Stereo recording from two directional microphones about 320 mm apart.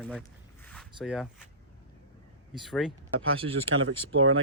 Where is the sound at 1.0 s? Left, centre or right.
Centre.